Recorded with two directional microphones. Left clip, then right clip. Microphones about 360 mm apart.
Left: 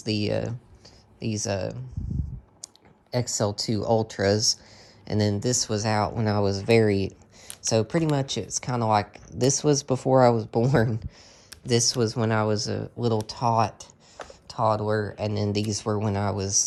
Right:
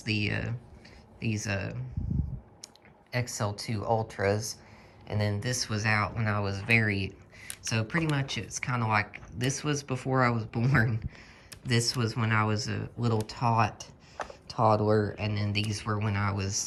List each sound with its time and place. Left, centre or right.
0.0 s speech: centre
3.1 s speech: centre